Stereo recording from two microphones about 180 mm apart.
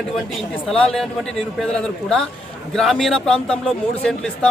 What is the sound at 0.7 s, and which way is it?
Speech, centre (ahead or behind).